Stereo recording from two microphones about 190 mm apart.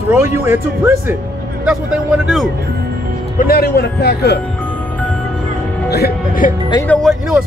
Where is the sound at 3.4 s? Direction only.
55° left (ahead or behind).